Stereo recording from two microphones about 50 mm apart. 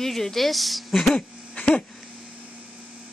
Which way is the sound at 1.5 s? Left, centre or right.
Left.